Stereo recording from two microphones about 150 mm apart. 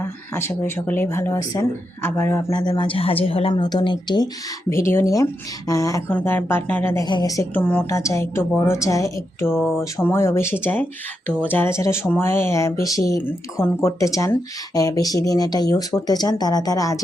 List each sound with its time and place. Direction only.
0.0 s a woman's voice: 15° left (ahead or behind)
2.5 s speech: 30° left (ahead or behind)
4.7 s a woman's voice: 15° left (ahead or behind)
7.0 s speech: 25° left (ahead or behind)
7.5 s a woman's voice: 10° left (ahead or behind)